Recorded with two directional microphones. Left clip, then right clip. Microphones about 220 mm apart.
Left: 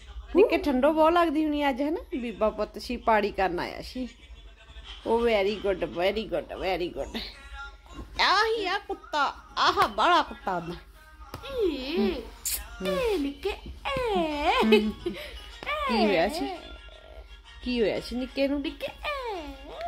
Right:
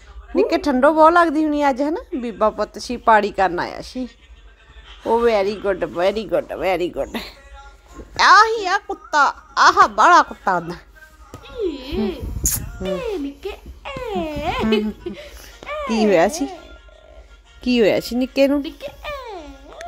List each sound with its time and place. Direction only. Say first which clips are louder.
0.4 s a woman's voice: right 5 dB; 25° right (ahead or behind)
5.2 s a woman's voice: right 7 dB; 20° right (ahead or behind)
17.6 s speech: right 11 dB; 40° right (ahead or behind)
18.6 s music: right 4 dB; 15° right (ahead or behind)